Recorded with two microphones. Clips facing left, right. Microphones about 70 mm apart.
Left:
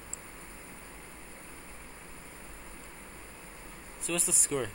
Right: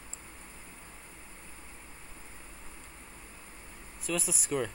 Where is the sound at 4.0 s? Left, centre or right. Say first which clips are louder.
Right 1 dB; centre.